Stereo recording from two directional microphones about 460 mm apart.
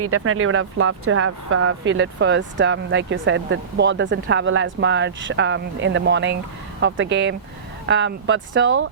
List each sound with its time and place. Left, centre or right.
0.0 s speech: right